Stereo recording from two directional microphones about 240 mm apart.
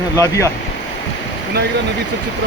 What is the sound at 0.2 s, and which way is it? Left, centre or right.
Speech, centre.